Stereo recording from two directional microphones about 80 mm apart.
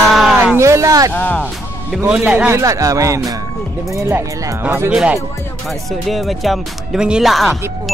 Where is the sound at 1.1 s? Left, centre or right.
Left.